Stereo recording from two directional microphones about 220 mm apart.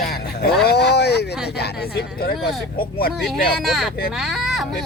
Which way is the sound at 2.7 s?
40° left (ahead or behind).